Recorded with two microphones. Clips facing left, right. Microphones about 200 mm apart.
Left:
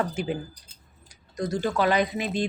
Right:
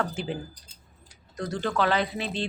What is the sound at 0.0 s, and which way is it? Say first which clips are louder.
A woman's voice: left 2 dB; 15° left (ahead or behind).